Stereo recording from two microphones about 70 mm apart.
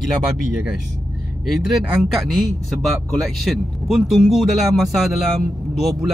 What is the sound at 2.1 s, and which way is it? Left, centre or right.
Speech, centre.